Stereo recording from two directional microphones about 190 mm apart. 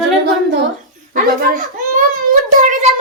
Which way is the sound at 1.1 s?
45° right (ahead or behind).